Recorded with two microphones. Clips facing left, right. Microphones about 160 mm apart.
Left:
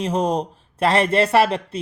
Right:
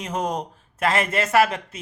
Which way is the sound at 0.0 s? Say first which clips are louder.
Left 6 dB; 30° left (ahead or behind).